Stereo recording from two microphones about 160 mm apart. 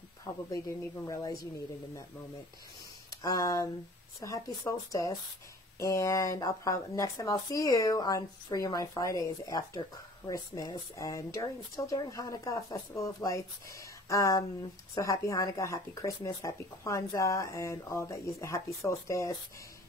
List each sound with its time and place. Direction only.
0.3 s speech: 20° left (ahead or behind)
3.2 s speech: 20° left (ahead or behind)